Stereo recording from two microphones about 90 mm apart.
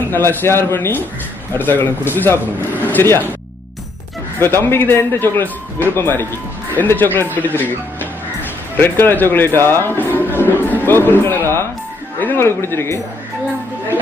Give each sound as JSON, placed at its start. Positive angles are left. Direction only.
{"t": 0.1, "sound": "speech", "side_deg": 25}
{"t": 4.4, "sound": "speech", "side_deg": 25}